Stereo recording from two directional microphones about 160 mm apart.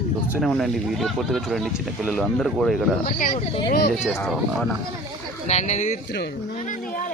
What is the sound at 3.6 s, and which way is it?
Speech, 80° left.